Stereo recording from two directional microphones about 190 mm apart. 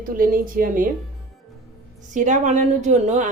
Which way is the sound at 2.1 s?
40° right (ahead or behind).